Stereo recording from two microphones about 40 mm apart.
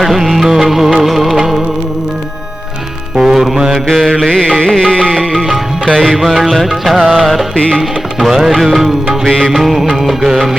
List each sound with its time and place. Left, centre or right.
0.0 s music: centre
3.2 s music: centre
3.8 s mantra: centre
4.3 s music: centre
5.3 s music: centre
7.5 s music: left
7.8 s music: centre